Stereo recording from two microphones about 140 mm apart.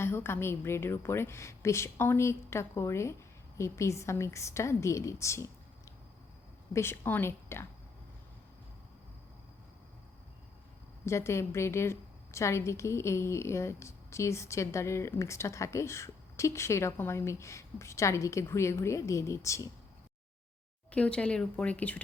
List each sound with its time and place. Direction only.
0.0 s a woman's voice: 15° left (ahead or behind)
11.0 s a woman's voice: 20° left (ahead or behind)
20.9 s speech: 10° left (ahead or behind)